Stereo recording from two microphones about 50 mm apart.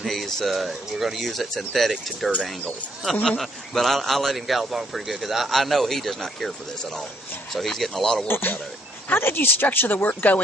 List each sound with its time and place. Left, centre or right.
0.0 s speech: centre
3.3 s speech: centre
7.5 s speech: centre
8.3 s speech: left